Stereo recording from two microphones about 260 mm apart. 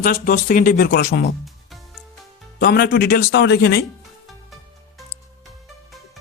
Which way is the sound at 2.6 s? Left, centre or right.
Left.